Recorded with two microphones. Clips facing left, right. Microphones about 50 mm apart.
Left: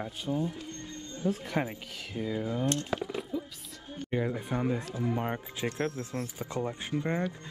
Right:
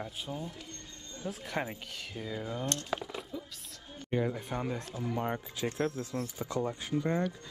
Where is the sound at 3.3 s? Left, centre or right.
Centre.